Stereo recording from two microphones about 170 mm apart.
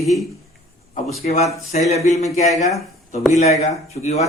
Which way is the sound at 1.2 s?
40° left (ahead or behind).